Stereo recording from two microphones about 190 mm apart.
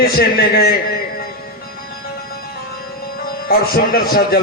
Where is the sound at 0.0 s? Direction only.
55° left (ahead or behind).